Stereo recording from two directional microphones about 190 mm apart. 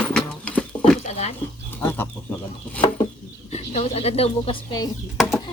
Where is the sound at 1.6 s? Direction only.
10° left (ahead or behind).